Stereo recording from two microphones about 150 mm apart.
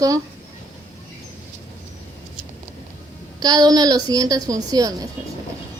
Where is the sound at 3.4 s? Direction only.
25° right (ahead or behind).